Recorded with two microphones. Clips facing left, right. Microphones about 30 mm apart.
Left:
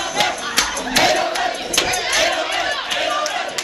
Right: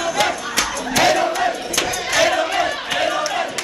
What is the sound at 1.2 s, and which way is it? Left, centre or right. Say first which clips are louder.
Crowd: right 1 dB; left.